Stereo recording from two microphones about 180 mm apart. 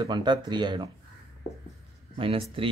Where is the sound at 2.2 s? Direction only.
30° right (ahead or behind).